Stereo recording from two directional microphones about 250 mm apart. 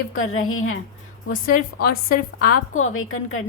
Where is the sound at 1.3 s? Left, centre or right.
Left.